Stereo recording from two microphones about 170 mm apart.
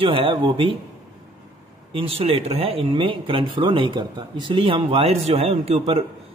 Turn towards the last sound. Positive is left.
turn(degrees=-35)  # may be behind; listen again after turning